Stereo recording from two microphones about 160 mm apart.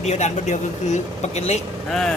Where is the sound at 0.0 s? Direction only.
45° left (ahead or behind).